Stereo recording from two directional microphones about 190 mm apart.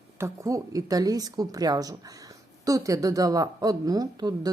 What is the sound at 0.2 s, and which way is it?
Speech, 15° right (ahead or behind).